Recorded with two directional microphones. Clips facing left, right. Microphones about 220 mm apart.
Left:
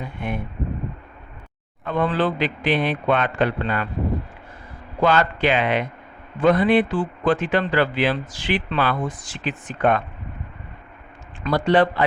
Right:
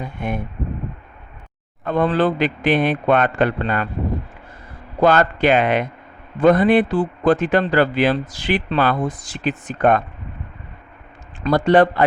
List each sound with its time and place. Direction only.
0.2 s speech: 45° right (ahead or behind)
1.8 s speech: 40° right (ahead or behind)
4.9 s a man's voice: 45° right (ahead or behind)
11.4 s speech: 45° right (ahead or behind)